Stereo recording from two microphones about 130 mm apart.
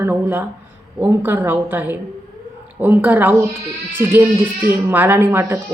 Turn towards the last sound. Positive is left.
turn(degrees=-20)  # may be behind; listen again after turning